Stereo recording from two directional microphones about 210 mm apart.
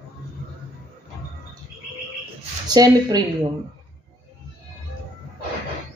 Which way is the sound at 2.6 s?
20° right (ahead or behind).